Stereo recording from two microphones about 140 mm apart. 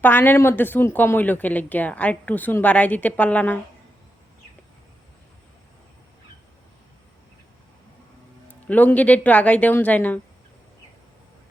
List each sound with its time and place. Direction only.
0.0 s a woman's voice: 15° left (ahead or behind)
8.6 s a woman's voice: 10° left (ahead or behind)